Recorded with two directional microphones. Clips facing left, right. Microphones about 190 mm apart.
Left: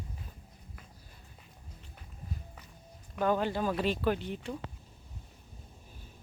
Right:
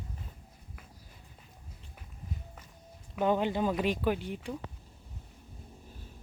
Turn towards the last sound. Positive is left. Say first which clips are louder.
# even
turn(degrees=-10)  # may be behind; listen again after turning